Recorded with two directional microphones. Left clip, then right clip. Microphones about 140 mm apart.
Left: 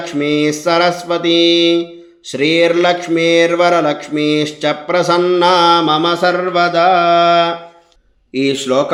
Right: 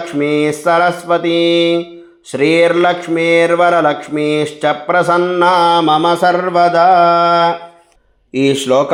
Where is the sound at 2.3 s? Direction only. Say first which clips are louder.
Right 2 dB; 5° left (ahead or behind).